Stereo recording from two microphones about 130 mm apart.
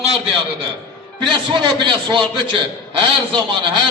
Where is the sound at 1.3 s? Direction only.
35° right (ahead or behind).